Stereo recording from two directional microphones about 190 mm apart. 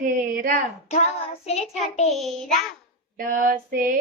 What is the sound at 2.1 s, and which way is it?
Child singing, centre (ahead or behind).